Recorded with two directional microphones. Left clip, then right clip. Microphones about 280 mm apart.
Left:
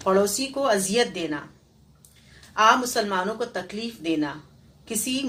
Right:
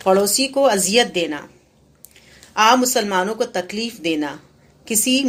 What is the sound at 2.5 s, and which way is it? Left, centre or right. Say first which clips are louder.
Speech: right 4 dB; right.